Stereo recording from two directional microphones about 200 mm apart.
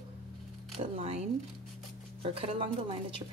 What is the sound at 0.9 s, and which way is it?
Speech, 30° right (ahead or behind).